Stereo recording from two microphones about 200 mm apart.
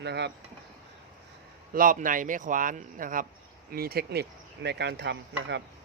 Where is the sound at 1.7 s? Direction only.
45° right (ahead or behind); by 5.6 s 60° right (ahead or behind).